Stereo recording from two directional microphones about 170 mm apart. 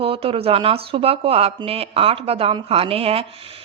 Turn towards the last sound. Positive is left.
turn(degrees=-35)  # may be behind; listen again after turning